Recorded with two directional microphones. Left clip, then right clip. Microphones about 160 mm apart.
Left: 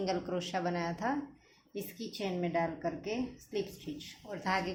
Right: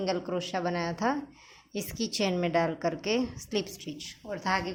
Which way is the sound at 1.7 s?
45° right (ahead or behind).